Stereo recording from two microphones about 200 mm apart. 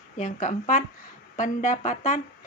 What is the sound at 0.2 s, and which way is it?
Speech, 40° left (ahead or behind).